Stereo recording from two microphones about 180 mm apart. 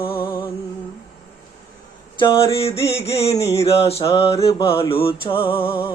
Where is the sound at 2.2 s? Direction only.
30° left (ahead or behind).